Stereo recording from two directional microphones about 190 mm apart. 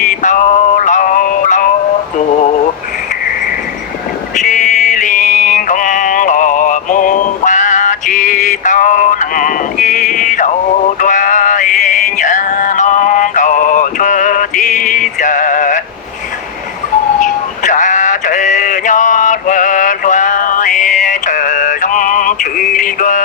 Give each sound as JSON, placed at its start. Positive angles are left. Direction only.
{"t": 0.0, "sound": "music", "side_deg": 40}
{"t": 2.1, "sound": "a sound", "side_deg": 40}
{"t": 4.4, "sound": "music", "side_deg": 40}
{"t": 17.2, "sound": "male singing", "side_deg": 40}